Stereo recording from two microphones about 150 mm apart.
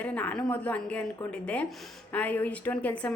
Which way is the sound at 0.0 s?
10° left (ahead or behind).